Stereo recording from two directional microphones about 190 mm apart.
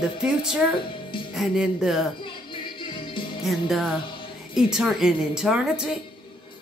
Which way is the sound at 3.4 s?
Centre (ahead or behind).